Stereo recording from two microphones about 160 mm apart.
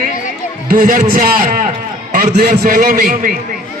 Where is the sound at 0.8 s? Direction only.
60° right (ahead or behind).